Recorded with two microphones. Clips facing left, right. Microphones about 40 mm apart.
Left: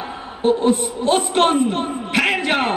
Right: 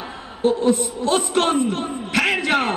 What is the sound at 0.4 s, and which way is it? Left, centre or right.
A man's voice, left.